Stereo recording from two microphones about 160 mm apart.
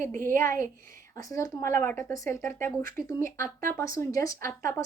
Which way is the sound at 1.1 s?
20° left (ahead or behind).